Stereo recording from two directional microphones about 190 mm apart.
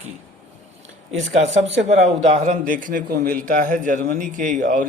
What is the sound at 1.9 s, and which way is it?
A man's voice, 35° right (ahead or behind).